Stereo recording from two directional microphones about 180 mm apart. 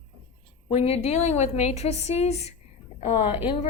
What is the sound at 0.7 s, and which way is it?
A woman's voice, 35° left (ahead or behind).